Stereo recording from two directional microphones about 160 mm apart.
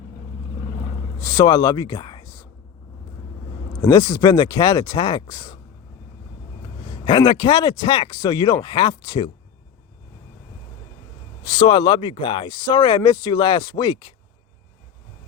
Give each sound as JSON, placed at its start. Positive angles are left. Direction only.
{"t": 1.2, "sound": "speech", "side_deg": 25}
{"t": 3.8, "sound": "speech", "side_deg": 20}
{"t": 7.0, "sound": "speech", "side_deg": 30}
{"t": 11.4, "sound": "speech", "side_deg": 30}